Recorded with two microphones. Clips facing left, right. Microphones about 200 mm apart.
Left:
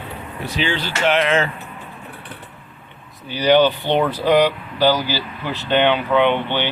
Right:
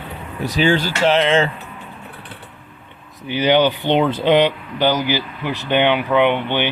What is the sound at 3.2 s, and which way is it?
Speech, 20° right (ahead or behind).